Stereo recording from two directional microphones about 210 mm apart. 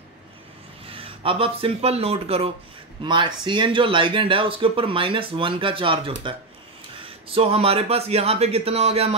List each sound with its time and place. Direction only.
0.8 s speech: 25° right (ahead or behind)